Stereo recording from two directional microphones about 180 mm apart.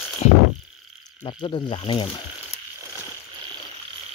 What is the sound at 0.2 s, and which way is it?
Frog, 35° left (ahead or behind).